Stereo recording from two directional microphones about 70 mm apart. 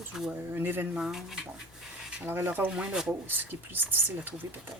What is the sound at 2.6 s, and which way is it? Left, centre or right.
Speech, centre.